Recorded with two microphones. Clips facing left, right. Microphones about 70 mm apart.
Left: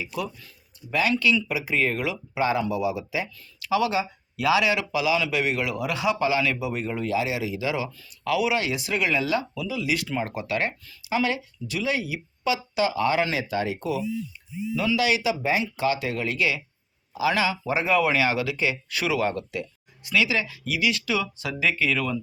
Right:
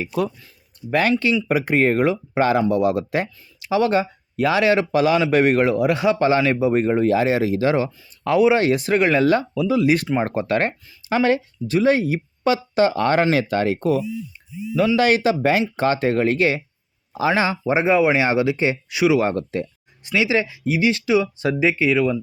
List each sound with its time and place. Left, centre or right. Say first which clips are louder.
0.0 s speech: right 8 dB; right
0.8 s speech: right 5 dB; right
3.6 s speech: right 4 dB; right
3.8 s speech: right 6 dB; right
15.4 s speech: right 6 dB; right
15.7 s speech: right 6 dB; right
18.9 s speech: right 9 dB; centre
19.2 s speech: right 5 dB; right